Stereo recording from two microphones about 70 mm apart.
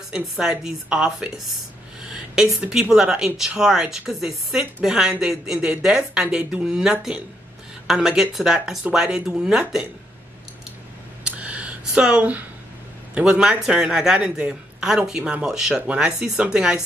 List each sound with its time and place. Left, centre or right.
0.1 s speech: centre
11.2 s a sound: centre
13.1 s speech: centre